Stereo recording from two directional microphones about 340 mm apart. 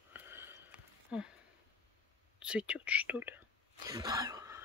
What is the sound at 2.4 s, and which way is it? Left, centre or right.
Speech, centre.